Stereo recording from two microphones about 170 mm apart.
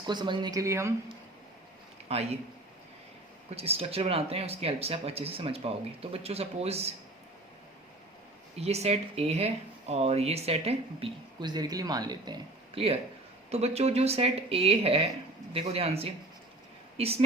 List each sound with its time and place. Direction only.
0.1 s speech: 25° right (ahead or behind)
2.0 s speech: 40° right (ahead or behind)
3.5 s speech: 35° right (ahead or behind)
8.5 s speech: 40° right (ahead or behind)